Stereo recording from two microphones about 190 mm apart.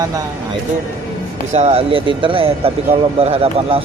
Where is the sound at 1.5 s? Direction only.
35° right (ahead or behind).